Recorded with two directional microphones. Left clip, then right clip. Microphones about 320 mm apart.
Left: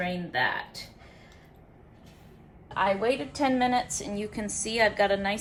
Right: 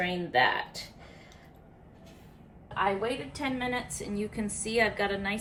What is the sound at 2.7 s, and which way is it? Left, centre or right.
A woman's voice, left.